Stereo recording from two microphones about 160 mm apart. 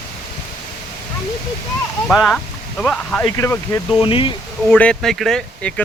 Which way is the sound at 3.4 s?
15° left (ahead or behind).